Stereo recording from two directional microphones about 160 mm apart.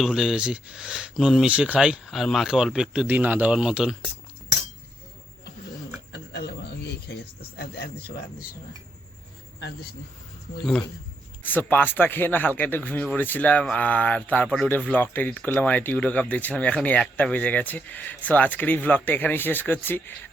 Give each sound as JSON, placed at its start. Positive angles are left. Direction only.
{"t": 0.0, "sound": "speech", "side_deg": 0}
{"t": 6.1, "sound": "a sound", "side_deg": 90}
{"t": 11.4, "sound": "speech", "side_deg": 10}